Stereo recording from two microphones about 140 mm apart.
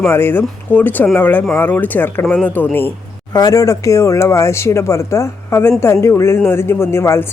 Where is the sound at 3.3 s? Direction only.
25° left (ahead or behind).